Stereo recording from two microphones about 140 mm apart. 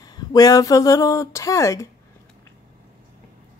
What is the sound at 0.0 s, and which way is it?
Speech, 25° left (ahead or behind).